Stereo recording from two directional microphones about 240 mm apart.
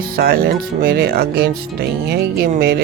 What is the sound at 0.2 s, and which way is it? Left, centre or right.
Speech, right.